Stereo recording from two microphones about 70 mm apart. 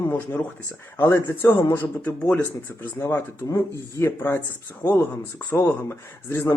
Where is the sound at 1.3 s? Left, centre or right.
Left.